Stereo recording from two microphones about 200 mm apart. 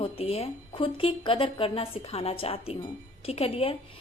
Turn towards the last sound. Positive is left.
turn(degrees=30)  # may be behind; listen again after turning